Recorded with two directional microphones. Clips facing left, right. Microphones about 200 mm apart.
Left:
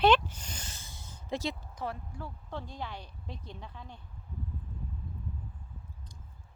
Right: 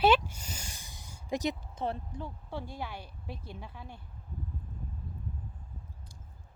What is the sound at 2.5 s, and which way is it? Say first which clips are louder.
Speech: even; 10° right (ahead or behind).